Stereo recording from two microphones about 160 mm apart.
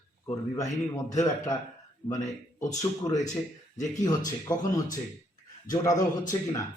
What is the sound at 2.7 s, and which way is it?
Speech, 20° left (ahead or behind).